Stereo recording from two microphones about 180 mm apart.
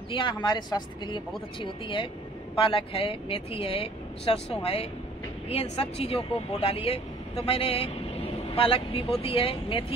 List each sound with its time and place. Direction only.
0.1 s speech: 25° left (ahead or behind)